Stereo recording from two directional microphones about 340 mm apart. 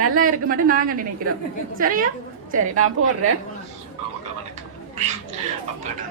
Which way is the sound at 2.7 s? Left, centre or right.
Right.